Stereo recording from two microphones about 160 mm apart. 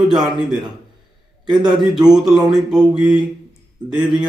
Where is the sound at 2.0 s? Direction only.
5° right (ahead or behind).